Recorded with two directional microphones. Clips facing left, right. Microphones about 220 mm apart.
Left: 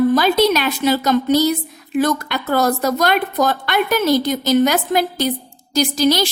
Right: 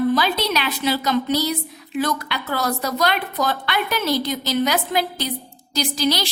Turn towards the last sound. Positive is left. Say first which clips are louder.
# left 6 dB
turn(degrees=45)  # may be behind; listen again after turning